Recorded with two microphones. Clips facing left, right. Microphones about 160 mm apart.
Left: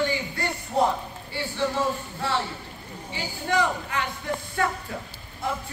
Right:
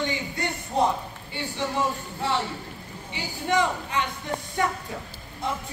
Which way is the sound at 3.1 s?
20° right (ahead or behind).